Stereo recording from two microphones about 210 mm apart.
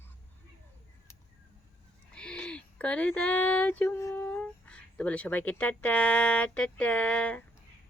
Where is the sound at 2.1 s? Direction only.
5° left (ahead or behind).